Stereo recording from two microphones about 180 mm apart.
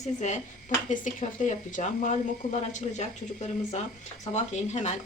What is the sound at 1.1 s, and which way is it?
Speech, 45° left (ahead or behind).